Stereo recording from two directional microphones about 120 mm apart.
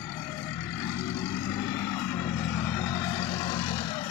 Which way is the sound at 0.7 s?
25° left (ahead or behind).